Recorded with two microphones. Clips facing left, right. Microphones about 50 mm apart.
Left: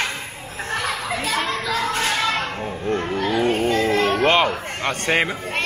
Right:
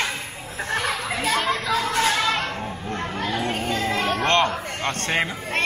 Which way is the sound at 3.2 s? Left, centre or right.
Centre.